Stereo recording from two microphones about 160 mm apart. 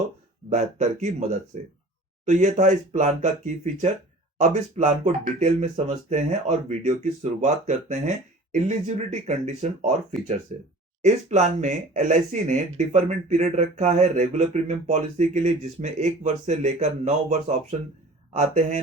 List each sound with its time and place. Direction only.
0.5 s speech: 50° right (ahead or behind)